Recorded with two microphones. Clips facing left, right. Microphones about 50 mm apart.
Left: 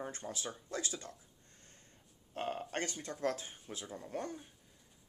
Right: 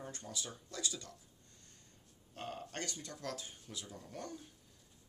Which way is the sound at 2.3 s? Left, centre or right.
Left.